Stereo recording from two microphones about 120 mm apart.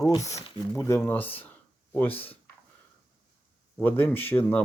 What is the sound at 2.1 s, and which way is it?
Speech, 50° left (ahead or behind).